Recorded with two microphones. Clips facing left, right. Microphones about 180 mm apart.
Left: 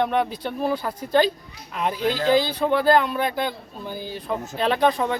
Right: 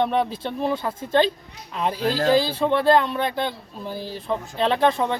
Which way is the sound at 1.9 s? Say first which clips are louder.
Even; 35° right (ahead or behind).